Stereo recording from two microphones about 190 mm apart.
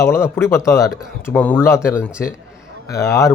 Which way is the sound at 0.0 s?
15° left (ahead or behind).